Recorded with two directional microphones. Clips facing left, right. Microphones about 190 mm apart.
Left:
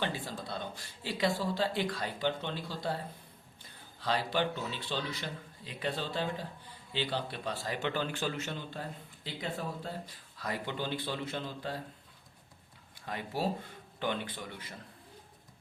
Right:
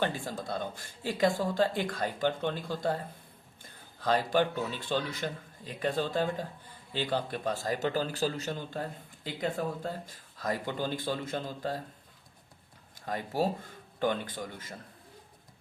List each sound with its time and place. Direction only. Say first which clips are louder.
0.0 s speech: right 4 dB; 45° right (ahead or behind)
13.1 s speech: right 4 dB; 40° right (ahead or behind)